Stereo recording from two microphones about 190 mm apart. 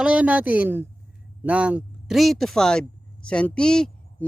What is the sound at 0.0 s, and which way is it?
A woman's voice, 5° right (ahead or behind).